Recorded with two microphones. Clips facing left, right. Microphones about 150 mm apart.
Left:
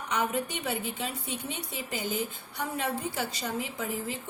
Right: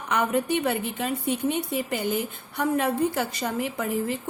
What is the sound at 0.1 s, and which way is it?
A woman's voice, 60° right (ahead or behind).